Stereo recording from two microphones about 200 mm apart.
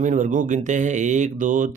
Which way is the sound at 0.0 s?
40° right (ahead or behind).